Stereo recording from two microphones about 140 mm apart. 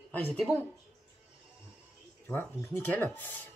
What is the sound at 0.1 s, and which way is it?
Speech, 10° left (ahead or behind).